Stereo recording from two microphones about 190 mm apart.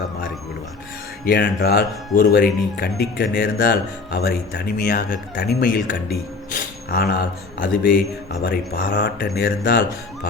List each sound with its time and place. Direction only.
1.2 s speech: 50° left (ahead or behind)